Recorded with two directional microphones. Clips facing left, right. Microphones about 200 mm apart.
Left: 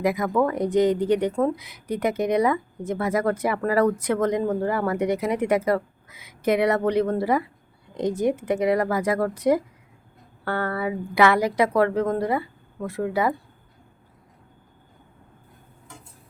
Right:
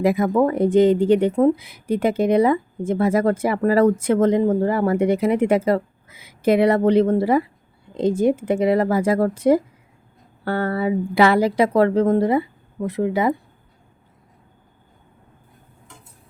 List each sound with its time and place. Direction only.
0.0 s speech: 25° right (ahead or behind)